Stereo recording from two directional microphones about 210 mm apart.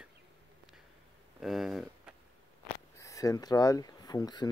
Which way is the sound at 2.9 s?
15° left (ahead or behind).